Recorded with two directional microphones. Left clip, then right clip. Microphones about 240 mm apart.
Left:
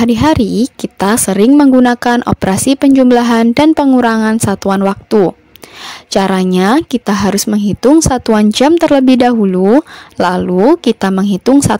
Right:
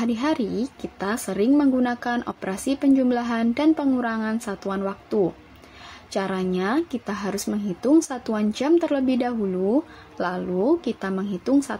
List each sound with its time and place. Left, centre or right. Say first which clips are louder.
0.0 s speech: left 14 dB; left